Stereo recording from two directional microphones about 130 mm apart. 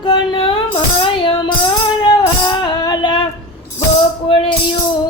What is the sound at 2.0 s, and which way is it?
Music, 35° left (ahead or behind).